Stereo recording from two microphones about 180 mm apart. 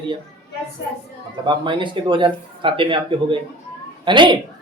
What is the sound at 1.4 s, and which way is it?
Speech, 25° right (ahead or behind).